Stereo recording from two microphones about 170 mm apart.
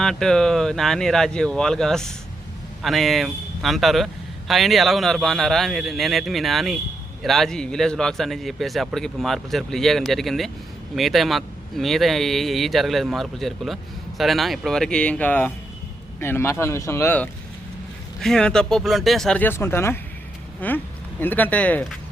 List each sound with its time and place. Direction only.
0.0 s a man's voice: 5° left (ahead or behind)
18.2 s a man's voice: 5° left (ahead or behind)